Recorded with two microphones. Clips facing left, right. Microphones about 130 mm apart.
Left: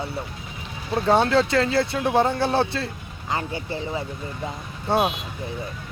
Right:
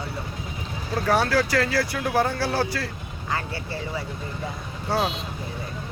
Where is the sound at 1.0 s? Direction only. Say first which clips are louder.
Left 3 dB; 25° left (ahead or behind).